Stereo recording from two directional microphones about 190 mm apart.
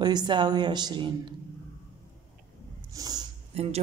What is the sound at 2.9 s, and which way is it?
Snort, 20° right (ahead or behind).